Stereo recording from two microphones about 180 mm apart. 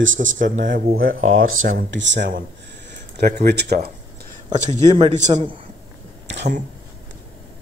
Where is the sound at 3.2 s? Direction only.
65° right (ahead or behind).